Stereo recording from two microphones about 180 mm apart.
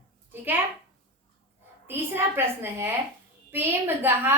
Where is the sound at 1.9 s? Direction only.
15° right (ahead or behind).